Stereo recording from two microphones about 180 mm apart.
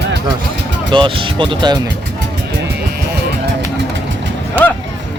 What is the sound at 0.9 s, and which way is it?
Speech, 25° right (ahead or behind).